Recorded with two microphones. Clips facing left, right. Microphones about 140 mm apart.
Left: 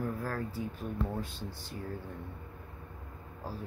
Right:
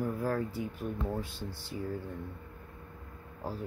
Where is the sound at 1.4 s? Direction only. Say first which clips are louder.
Right 1 dB; 20° left (ahead or behind).